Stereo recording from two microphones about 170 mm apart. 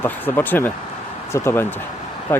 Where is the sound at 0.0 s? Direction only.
10° left (ahead or behind).